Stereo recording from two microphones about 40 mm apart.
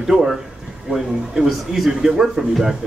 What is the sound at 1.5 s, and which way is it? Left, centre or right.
Speech, centre.